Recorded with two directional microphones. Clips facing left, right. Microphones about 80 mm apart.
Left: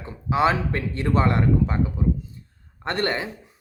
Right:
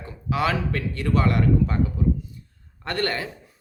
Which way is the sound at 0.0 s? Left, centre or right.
Left.